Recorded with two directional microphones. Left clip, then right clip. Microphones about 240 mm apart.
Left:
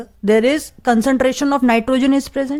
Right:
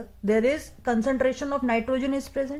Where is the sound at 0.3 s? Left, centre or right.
Left.